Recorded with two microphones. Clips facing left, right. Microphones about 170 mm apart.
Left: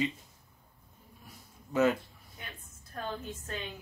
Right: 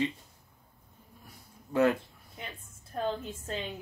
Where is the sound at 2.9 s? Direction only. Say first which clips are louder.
Right 5 dB; 25° right (ahead or behind).